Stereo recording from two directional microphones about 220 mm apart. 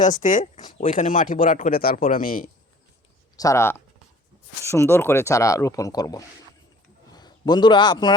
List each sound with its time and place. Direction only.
0.0 s speech: 35° left (ahead or behind)
3.3 s a man's voice: 15° left (ahead or behind)